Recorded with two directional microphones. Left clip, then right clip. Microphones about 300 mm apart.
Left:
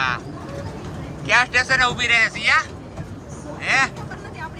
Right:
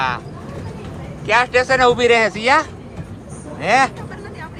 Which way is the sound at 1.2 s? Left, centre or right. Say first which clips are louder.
Right 2 dB; centre.